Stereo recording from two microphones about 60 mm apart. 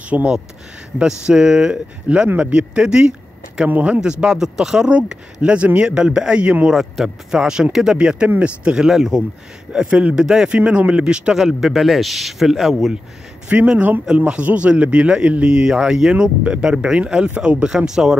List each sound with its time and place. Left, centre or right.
0.1 s speech: right
3.6 s speech: right
4.0 s speech: centre
6.7 s speech: centre
8.8 s speech: centre
11.3 s speech: centre
13.5 s speech: right
17.6 s speech: centre